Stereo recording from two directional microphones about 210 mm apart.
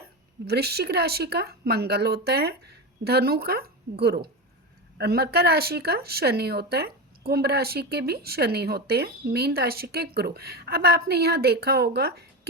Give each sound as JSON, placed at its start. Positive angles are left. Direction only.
{"t": 0.4, "sound": "speech", "side_deg": -50}